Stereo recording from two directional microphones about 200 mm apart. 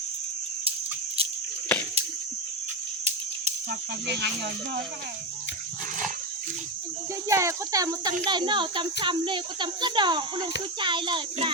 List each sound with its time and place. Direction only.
3.7 s speech: 60° right (ahead or behind)
7.3 s a child's voice: 15° right (ahead or behind)